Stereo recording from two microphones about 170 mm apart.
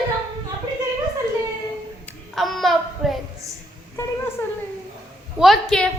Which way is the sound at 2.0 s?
Centre (ahead or behind).